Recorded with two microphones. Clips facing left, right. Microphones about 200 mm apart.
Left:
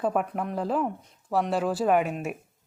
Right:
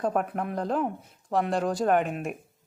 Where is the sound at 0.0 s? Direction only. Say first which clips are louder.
Even; 5° left (ahead or behind).